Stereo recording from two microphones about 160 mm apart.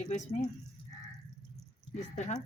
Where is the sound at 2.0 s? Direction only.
45° left (ahead or behind).